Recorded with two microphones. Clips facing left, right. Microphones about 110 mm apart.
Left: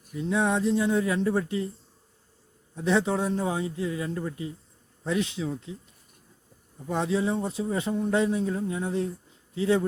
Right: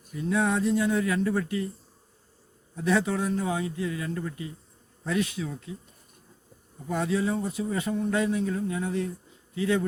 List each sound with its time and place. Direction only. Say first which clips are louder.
0.1 s speech: even; 20° left (ahead or behind)
2.7 s speech: left 1 dB; 25° left (ahead or behind)
6.8 s speech: left 1 dB; 20° left (ahead or behind)